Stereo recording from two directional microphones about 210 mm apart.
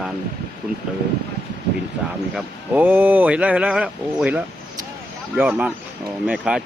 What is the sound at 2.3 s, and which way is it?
Speech, 5° right (ahead or behind).